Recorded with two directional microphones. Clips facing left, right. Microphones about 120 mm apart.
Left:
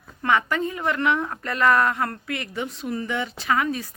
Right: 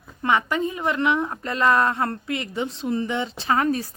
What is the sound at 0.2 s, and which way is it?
Speech, 20° right (ahead or behind).